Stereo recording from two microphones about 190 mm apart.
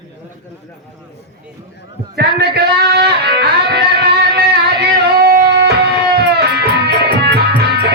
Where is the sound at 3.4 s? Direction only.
60° right (ahead or behind).